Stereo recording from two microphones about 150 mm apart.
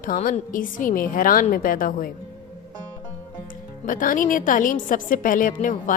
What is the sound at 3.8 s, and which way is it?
A woman's voice, 65° left (ahead or behind).